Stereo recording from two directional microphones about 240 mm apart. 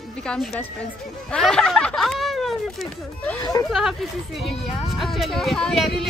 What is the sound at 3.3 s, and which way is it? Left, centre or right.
Speech, centre.